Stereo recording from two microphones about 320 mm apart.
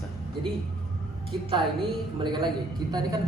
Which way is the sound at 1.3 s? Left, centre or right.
Centre.